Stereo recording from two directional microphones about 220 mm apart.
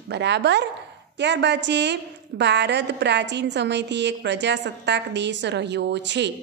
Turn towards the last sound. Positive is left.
turn(degrees=-50)  # may be behind; listen again after turning